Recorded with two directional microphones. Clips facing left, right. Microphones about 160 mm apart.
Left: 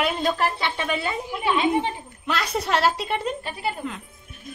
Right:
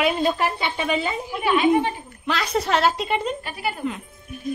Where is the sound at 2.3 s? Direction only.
Centre (ahead or behind).